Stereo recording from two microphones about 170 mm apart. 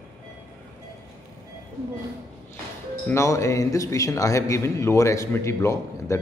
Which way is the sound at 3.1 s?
15° left (ahead or behind).